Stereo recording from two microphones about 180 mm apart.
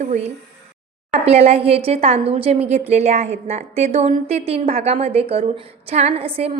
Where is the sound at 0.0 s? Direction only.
40° right (ahead or behind).